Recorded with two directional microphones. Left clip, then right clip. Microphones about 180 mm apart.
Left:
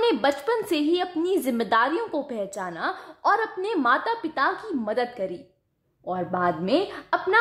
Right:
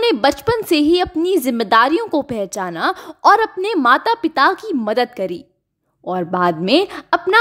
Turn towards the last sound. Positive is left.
turn(degrees=-40)  # may be behind; listen again after turning